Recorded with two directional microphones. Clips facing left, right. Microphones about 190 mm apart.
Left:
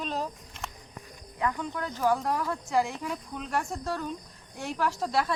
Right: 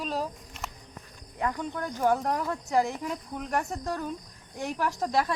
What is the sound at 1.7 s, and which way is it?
Speech, 20° right (ahead or behind).